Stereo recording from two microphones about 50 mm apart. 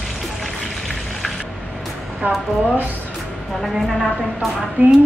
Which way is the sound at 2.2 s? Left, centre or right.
Right.